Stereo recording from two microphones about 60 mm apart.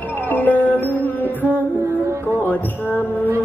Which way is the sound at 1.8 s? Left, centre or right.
Right.